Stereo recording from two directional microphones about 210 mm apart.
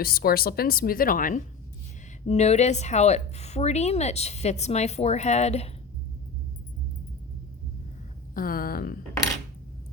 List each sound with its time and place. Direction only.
0.0 s a woman's voice: 45° left (ahead or behind)
8.4 s speech: 45° left (ahead or behind)